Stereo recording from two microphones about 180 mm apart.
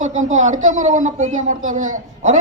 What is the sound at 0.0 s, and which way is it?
A man's voice, 45° right (ahead or behind).